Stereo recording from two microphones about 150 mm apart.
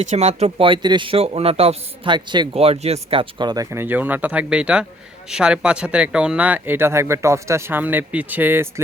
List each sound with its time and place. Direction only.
0.1 s speech: 45° right (ahead or behind)
0.7 s a man's voice: 30° right (ahead or behind); by 8.8 s 15° right (ahead or behind)